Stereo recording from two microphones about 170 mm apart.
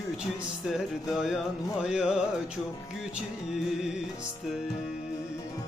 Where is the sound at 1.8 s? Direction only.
5° right (ahead or behind).